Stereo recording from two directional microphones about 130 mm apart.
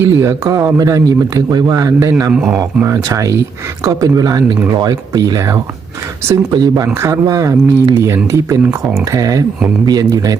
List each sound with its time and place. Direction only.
0.0 s speech: 25° right (ahead or behind)
2.3 s speech: 5° right (ahead or behind)
2.8 s speech: 25° right (ahead or behind)